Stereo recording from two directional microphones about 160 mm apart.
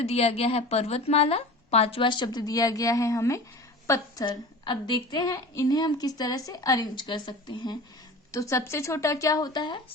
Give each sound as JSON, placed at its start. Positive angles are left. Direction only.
{"t": 0.0, "sound": "a woman's voice", "side_deg": 40}
{"t": 4.3, "sound": "a woman's voice", "side_deg": 30}